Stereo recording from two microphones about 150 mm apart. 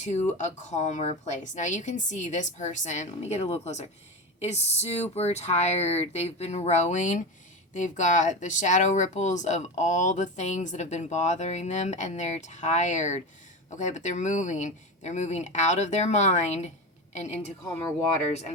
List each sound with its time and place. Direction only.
0.0 s speech: 50° left (ahead or behind)